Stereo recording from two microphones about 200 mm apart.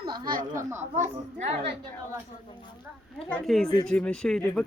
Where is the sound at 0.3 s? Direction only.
45° right (ahead or behind).